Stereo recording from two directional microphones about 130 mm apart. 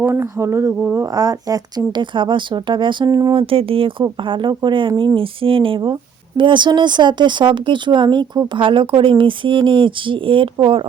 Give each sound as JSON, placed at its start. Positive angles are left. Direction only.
{"t": 0.0, "sound": "speech", "side_deg": -20}
{"t": 3.3, "sound": "speech", "side_deg": -45}